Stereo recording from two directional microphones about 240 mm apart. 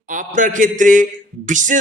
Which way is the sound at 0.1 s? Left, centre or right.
Right.